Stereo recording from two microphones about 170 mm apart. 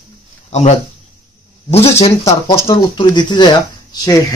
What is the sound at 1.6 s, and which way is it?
Speech, 40° left (ahead or behind).